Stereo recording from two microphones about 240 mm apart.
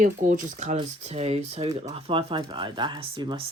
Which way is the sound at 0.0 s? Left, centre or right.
Right.